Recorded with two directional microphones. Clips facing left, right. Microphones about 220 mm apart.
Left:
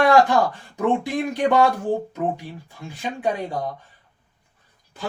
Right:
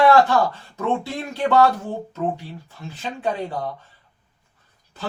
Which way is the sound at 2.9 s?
15° left (ahead or behind).